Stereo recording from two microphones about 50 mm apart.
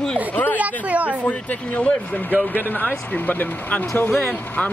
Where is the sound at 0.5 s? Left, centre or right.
Right.